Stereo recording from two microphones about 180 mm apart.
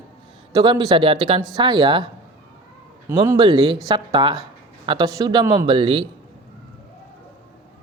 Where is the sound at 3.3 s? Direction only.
25° right (ahead or behind).